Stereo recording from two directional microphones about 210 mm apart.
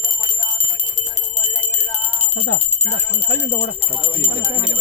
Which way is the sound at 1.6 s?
35° left (ahead or behind).